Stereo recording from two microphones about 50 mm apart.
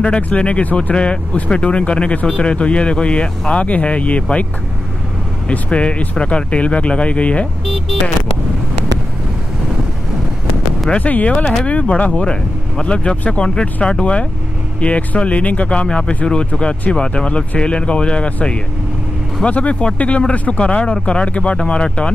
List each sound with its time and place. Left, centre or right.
0.0 s speech: left
5.5 s speech: left
7.6 s speech: centre
11.0 s speech: left